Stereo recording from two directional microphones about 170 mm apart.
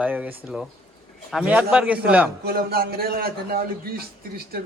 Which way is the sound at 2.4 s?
65° right (ahead or behind).